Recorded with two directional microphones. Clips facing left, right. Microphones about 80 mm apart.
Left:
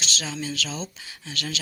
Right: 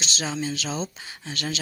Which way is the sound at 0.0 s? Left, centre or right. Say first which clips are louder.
Right 2 dB; right.